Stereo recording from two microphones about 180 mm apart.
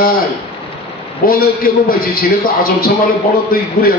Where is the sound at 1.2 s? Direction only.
55° left (ahead or behind).